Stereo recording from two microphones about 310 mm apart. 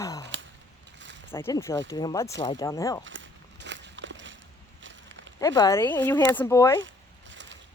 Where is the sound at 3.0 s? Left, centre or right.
Right.